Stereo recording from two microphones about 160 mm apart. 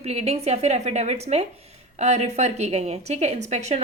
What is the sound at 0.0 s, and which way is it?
A woman's voice, 40° right (ahead or behind).